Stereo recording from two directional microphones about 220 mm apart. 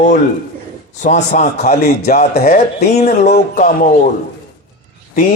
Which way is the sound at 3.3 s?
40° left (ahead or behind).